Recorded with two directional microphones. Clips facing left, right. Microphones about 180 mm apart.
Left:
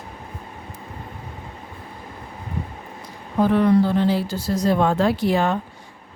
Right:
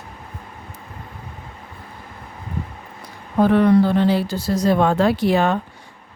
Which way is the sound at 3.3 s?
65° right (ahead or behind).